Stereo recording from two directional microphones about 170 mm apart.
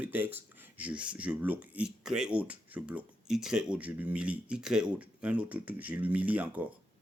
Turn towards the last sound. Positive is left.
turn(degrees=-10)  # may be behind; listen again after turning